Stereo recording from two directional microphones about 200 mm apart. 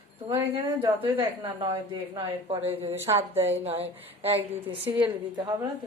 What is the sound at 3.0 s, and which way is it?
Speech, 10° right (ahead or behind).